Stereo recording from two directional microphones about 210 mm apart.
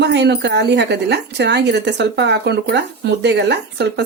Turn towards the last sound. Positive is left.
turn(degrees=-55)  # may be behind; listen again after turning